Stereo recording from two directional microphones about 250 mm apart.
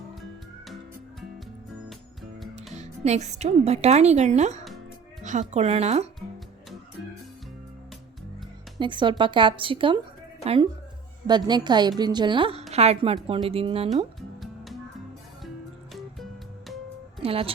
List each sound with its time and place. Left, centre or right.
2.7 s a woman's voice: right
8.8 s a woman's voice: centre
13.9 s music: centre
15.9 s music: centre
17.2 s speech: right